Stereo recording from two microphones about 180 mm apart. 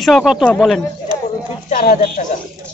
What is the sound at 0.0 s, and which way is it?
Speech, centre (ahead or behind).